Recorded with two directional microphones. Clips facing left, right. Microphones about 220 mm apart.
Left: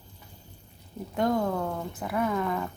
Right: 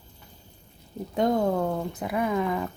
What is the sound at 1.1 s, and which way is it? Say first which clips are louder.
Speech: right 3 dB; 20° right (ahead or behind).